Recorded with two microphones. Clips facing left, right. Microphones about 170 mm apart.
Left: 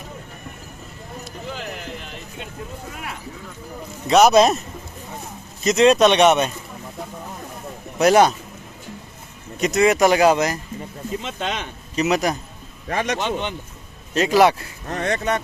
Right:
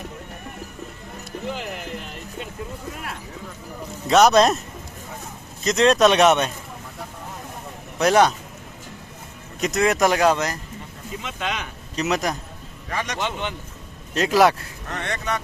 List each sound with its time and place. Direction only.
4.0 s speech: centre (ahead or behind)
5.6 s speech: 5° left (ahead or behind)
7.9 s speech: 5° left (ahead or behind)
9.6 s speech: centre (ahead or behind)
11.2 s speech: 30° left (ahead or behind)
11.9 s speech: 5° left (ahead or behind)
12.9 s speech: 50° left (ahead or behind)
13.1 s speech: 20° left (ahead or behind)
14.1 s speech: centre (ahead or behind)
14.8 s speech: 40° left (ahead or behind)